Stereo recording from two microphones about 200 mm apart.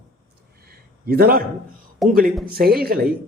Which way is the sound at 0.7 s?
50° right (ahead or behind).